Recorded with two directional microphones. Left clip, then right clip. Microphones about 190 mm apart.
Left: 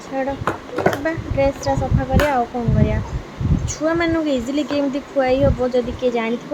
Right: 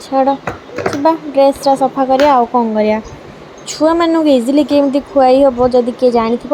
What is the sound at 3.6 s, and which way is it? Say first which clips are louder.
A woman's voice: right 8 dB; 25° right (ahead or behind).